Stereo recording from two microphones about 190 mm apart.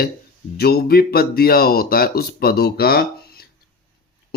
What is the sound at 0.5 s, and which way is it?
A man's voice, 55° left (ahead or behind).